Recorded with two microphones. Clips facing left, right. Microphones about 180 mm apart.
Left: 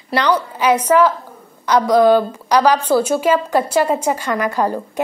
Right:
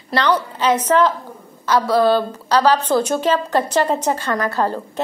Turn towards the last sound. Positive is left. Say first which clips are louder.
# left 2 dB
turn(degrees=15)  # may be behind; listen again after turning